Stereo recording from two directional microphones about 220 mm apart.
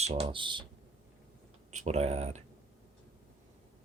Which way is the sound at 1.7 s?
30° right (ahead or behind).